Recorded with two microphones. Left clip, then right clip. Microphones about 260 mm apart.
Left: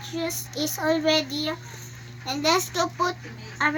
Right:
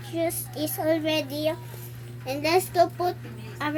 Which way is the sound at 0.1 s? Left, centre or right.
Left.